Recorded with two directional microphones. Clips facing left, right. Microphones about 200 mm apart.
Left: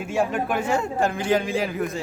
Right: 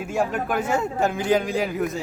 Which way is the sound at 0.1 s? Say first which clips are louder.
Left 1 dB; centre (ahead or behind).